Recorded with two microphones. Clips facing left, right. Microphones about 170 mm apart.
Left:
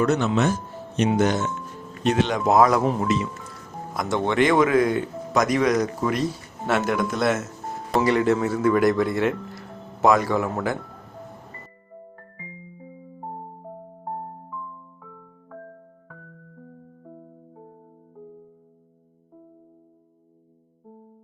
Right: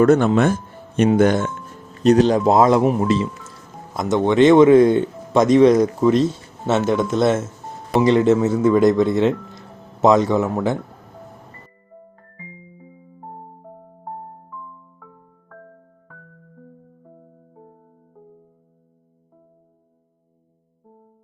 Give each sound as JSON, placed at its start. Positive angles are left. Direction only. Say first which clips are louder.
{"t": 0.0, "sound": "speech", "louder": "right 7 dB", "side_deg": -50}
{"t": 2.0, "sound": "speech", "louder": "right 7 dB", "side_deg": -40}
{"t": 12.5, "sound": "music", "louder": "even", "side_deg": -30}
{"t": 12.8, "sound": "music", "louder": "left 4 dB", "side_deg": 30}